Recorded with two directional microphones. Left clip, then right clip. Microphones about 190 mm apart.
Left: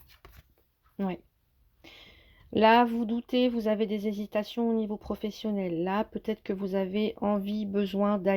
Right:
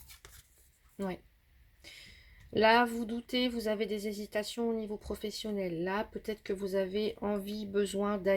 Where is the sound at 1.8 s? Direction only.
35° left (ahead or behind).